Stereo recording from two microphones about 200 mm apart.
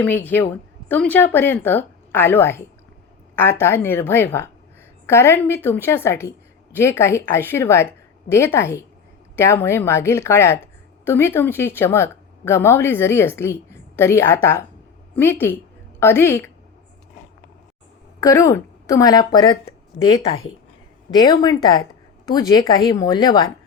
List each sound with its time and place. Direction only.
0.0 s a woman's voice: 10° left (ahead or behind)
18.2 s speech: 15° left (ahead or behind)
21.2 s speech: 20° left (ahead or behind)